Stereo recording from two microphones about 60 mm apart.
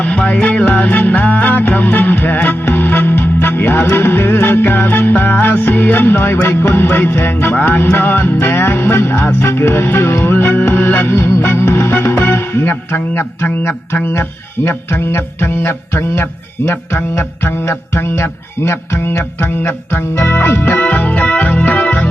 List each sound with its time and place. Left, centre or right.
0.0 s music: left